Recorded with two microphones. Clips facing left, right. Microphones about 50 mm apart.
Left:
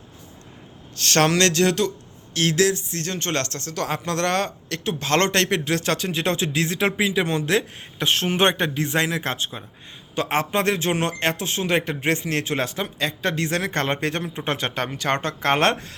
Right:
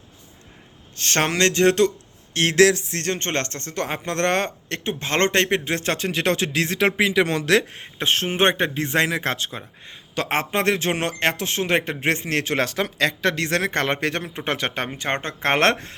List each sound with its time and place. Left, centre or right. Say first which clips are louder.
0.9 s speech: left 2 dB; right
1.6 s speech: right 4 dB; right
3.2 s speech: even; right
5.8 s speech: even; right
6.1 s speech: right 2 dB; right
7.7 s speech: even; right
10.2 s speech: left 1 dB; right
14.8 s speech: left 2 dB; right